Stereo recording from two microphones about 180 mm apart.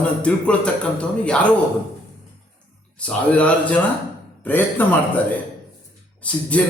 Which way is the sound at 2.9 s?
5° left (ahead or behind).